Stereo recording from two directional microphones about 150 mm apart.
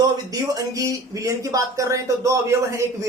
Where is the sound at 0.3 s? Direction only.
25° right (ahead or behind).